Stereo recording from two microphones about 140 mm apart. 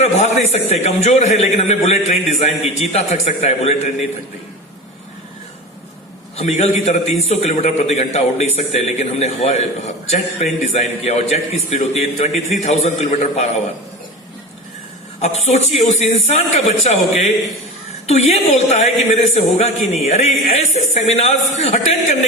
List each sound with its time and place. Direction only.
0.0 s a man's voice: 50° left (ahead or behind)
6.3 s a man's voice: 50° left (ahead or behind)
15.2 s a woman's voice: 50° left (ahead or behind)